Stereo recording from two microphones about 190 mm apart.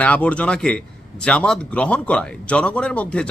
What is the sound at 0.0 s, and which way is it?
Speech, 5° left (ahead or behind).